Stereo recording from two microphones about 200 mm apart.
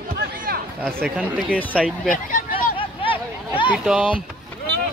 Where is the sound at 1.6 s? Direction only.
5° left (ahead or behind).